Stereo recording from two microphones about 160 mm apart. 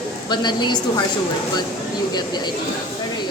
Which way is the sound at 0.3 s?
25° left (ahead or behind).